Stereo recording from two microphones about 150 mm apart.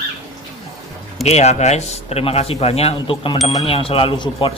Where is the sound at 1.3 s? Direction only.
50° left (ahead or behind).